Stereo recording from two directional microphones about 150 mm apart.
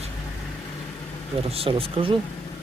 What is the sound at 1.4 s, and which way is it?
Speech, 40° right (ahead or behind).